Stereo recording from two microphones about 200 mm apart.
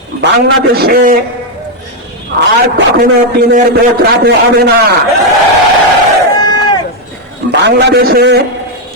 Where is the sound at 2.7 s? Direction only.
50° right (ahead or behind).